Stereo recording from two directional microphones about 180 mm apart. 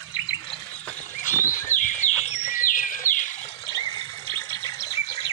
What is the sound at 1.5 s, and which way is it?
Bird, 45° left (ahead or behind).